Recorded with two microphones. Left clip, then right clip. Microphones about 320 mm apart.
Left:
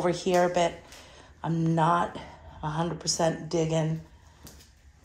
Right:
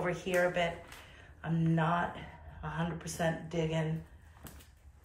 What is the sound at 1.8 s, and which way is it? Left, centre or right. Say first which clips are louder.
Speech: left 9 dB; centre.